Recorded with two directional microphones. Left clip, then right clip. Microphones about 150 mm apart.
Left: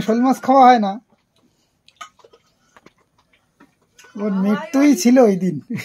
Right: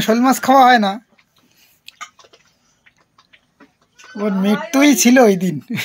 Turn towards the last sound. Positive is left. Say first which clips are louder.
# right 3 dB
turn(degrees=-5)  # may be behind; listen again after turning